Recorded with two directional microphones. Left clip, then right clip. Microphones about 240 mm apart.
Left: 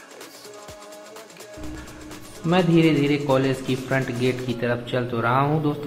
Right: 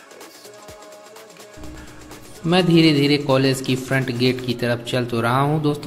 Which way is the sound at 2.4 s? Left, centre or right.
Right.